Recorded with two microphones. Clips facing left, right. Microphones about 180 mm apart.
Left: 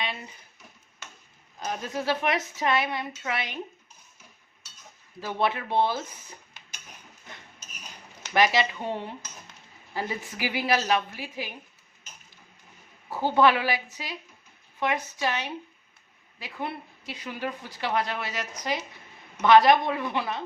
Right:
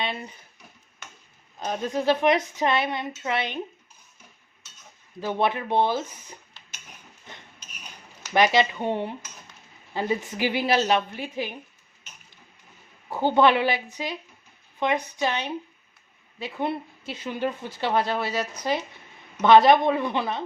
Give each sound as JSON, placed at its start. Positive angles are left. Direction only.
{"t": 1.5, "sound": "speech", "side_deg": -20}
{"t": 5.2, "sound": "speech", "side_deg": -20}
{"t": 8.3, "sound": "speech", "side_deg": -25}
{"t": 13.1, "sound": "speech", "side_deg": -20}